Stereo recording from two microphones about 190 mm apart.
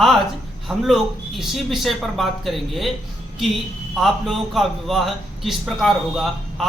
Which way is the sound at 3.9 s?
Centre (ahead or behind).